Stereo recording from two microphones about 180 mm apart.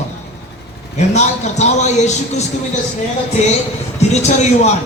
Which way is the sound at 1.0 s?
40° left (ahead or behind).